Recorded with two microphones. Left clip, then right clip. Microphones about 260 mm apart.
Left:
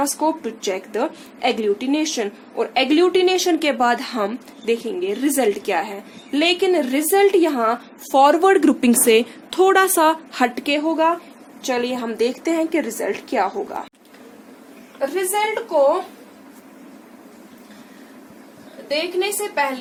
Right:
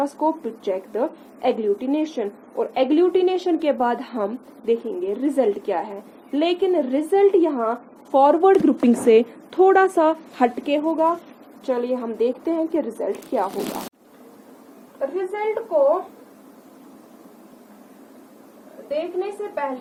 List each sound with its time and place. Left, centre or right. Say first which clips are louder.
0.0 s a woman's voice: left 2 dB; centre
15.1 s a woman's voice: left 4 dB; centre